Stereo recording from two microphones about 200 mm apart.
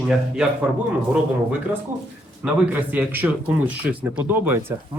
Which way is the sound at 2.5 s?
5° right (ahead or behind).